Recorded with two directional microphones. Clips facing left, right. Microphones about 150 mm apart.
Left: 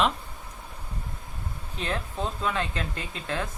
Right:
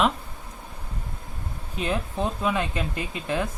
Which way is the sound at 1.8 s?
10° right (ahead or behind).